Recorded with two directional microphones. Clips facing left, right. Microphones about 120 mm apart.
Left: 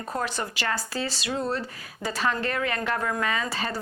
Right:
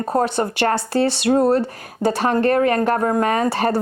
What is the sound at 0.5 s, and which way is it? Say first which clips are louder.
Speech: right 11 dB; 60° right (ahead or behind).